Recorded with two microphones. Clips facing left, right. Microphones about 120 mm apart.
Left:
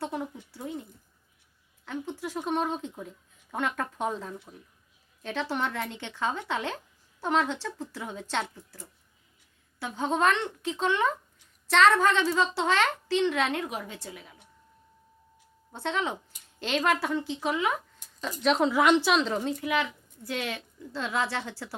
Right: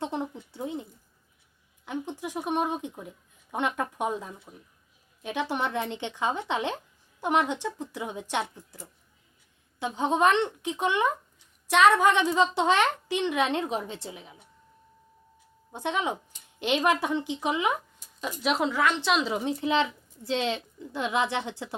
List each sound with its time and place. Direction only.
0.0 s a sound: 20° right (ahead or behind)
3.5 s a woman's voice: 20° right (ahead or behind)
15.7 s a woman's voice: 15° right (ahead or behind)
18.7 s a woman's voice: 15° left (ahead or behind)
19.0 s speech: 5° right (ahead or behind)
19.5 s a woman's voice: 25° right (ahead or behind)